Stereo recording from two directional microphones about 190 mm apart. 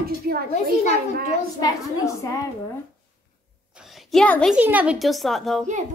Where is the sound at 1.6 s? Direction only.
20° left (ahead or behind).